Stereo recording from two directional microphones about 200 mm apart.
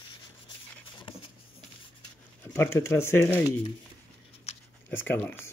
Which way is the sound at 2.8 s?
15° left (ahead or behind).